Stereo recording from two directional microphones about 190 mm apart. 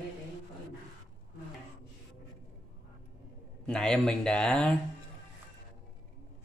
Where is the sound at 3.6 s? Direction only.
5° left (ahead or behind).